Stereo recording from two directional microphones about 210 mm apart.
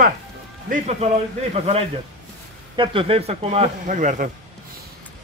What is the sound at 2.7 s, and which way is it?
A man's voice, 25° right (ahead or behind).